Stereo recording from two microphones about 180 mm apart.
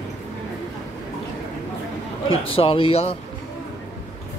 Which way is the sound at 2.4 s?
30° left (ahead or behind).